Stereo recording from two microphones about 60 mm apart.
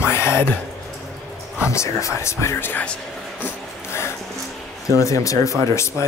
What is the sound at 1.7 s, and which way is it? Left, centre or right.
Speech, left.